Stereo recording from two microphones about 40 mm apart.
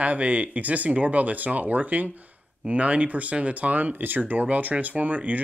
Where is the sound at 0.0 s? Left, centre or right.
Right.